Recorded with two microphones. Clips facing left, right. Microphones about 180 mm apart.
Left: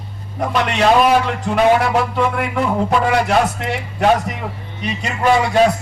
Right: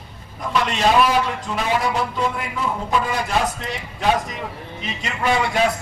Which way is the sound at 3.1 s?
70° left (ahead or behind).